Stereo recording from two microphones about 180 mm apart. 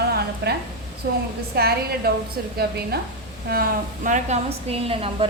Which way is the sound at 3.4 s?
55° right (ahead or behind).